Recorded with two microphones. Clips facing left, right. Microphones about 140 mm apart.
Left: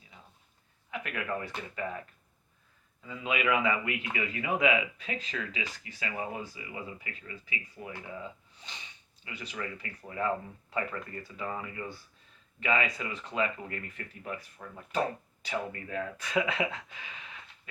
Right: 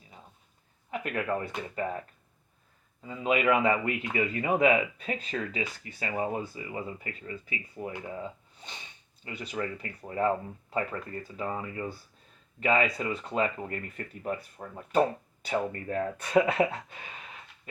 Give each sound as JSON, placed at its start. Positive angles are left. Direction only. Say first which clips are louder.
{"t": 0.9, "sound": "a man's voice", "louder": "right 5 dB", "side_deg": -35}
{"t": 3.0, "sound": "a man's voice", "louder": "right 5 dB", "side_deg": -35}
{"t": 8.1, "sound": "gasp", "louder": "right 4 dB", "side_deg": -45}
{"t": 9.2, "sound": "a man's voice", "louder": "right 5 dB", "side_deg": -35}
{"t": 12.5, "sound": "a man's voice", "louder": "right 4 dB", "side_deg": -40}